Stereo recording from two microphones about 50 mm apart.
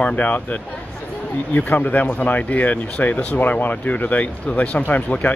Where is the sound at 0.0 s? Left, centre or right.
Left.